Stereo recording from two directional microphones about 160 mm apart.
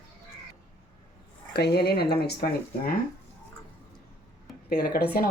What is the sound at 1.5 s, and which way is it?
Speech, 90° left.